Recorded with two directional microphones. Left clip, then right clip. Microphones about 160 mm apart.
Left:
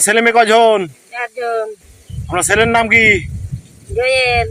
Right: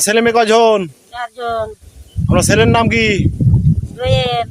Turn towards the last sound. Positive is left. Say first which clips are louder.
# left 3 dB
turn(degrees=-10)  # may be behind; listen again after turning